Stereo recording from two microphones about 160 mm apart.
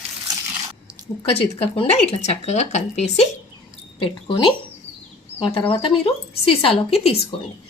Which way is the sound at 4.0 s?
35° left (ahead or behind).